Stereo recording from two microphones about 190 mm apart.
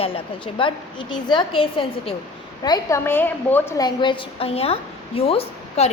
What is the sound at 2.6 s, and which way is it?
A woman's voice, 15° left (ahead or behind).